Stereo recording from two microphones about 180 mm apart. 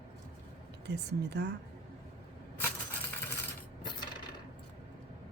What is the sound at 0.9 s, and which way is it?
Speech, 70° right (ahead or behind).